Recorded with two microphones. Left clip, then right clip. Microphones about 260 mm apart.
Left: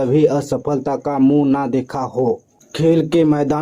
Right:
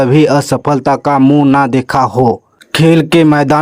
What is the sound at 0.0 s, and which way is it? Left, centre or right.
Speech, right.